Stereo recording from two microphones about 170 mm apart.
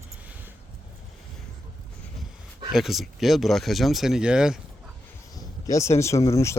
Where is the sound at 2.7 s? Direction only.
Centre (ahead or behind).